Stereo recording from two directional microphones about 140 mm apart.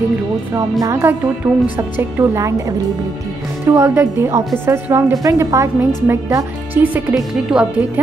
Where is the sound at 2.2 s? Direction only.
20° right (ahead or behind).